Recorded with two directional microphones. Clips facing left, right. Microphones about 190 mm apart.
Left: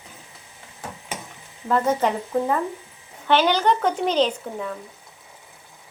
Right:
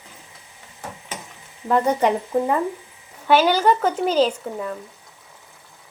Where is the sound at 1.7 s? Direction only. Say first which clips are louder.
Right 2 dB; 15° right (ahead or behind).